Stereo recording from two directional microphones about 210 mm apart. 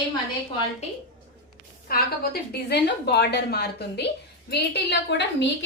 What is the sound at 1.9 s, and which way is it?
A woman's voice, 45° left (ahead or behind).